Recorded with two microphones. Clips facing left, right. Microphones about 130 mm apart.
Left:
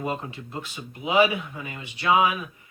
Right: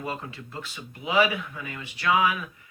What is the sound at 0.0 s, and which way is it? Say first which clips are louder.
Speech: left 4 dB; 20° left (ahead or behind).